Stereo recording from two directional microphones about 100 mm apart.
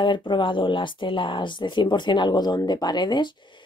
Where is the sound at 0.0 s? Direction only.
55° left (ahead or behind).